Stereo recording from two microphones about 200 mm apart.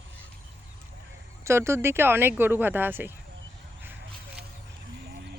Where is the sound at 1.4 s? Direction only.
15° right (ahead or behind).